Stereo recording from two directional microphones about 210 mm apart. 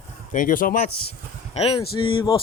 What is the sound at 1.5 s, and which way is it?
Speech, 30° left (ahead or behind).